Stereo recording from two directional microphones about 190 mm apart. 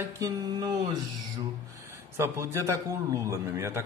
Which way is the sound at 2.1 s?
15° right (ahead or behind).